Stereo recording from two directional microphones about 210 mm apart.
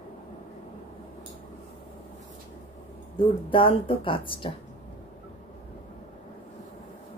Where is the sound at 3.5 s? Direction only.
25° left (ahead or behind).